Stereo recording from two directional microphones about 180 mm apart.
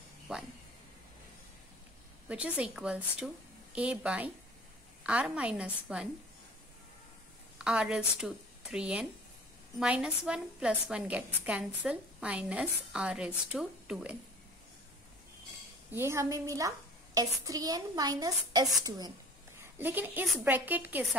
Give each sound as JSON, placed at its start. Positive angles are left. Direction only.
{"t": 0.3, "sound": "speech", "side_deg": -5}
{"t": 2.2, "sound": "a woman's voice", "side_deg": -5}
{"t": 7.5, "sound": "a woman's voice", "side_deg": -5}
{"t": 15.9, "sound": "a child's voice", "side_deg": -15}
{"t": 19.8, "sound": "a woman's voice", "side_deg": -10}